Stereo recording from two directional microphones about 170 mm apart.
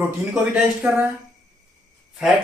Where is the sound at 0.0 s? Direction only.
10° right (ahead or behind).